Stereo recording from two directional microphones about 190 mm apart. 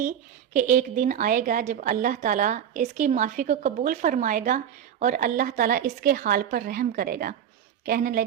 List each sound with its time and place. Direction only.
0.5 s a woman's voice: 45° right (ahead or behind)